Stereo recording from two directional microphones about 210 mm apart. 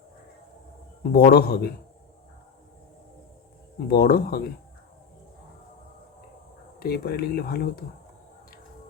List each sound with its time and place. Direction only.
1.1 s speech: 50° left (ahead or behind)
3.8 s speech: 45° left (ahead or behind)
6.7 s speech: 45° left (ahead or behind)